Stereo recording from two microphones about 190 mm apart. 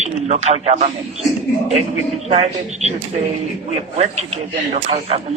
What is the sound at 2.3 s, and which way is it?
Speech, 35° right (ahead or behind).